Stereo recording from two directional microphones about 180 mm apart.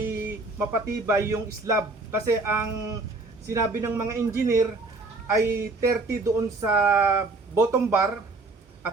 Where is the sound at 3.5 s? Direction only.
15° right (ahead or behind).